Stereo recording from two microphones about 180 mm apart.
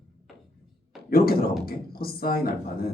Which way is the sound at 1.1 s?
55° left (ahead or behind).